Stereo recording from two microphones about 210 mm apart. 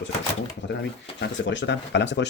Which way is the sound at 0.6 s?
60° left (ahead or behind).